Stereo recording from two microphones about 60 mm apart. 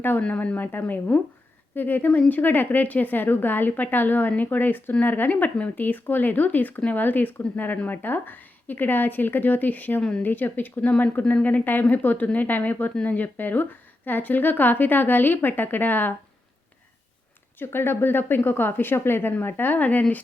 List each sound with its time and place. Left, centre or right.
0.2 s speech: left
10.0 s speech: centre
10.2 s a woman's voice: left
17.6 s speech: left